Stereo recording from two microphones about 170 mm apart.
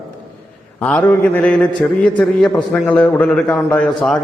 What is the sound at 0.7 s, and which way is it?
A man's voice, 10° left (ahead or behind).